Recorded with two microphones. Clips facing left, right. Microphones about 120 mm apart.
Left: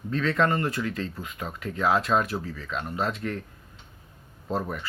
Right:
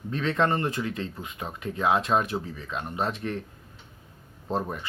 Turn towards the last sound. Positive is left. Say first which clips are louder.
# even
turn(degrees=-25)  # may be behind; listen again after turning